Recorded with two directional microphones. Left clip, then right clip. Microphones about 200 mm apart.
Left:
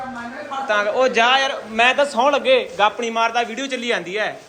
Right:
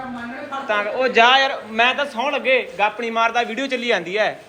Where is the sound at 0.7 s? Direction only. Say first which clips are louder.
Left 2 dB; 15° left (ahead or behind).